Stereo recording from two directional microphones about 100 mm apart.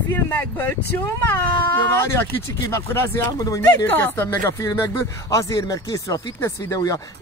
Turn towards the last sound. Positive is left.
turn(degrees=35)  # may be behind; listen again after turning